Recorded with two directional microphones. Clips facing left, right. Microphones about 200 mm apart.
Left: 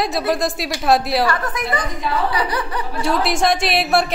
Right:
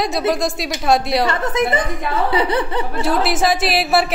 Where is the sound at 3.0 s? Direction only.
Centre (ahead or behind).